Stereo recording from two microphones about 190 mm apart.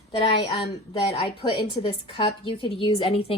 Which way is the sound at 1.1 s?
30° left (ahead or behind).